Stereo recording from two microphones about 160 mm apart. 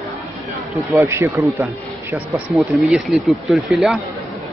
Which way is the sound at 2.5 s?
Centre (ahead or behind).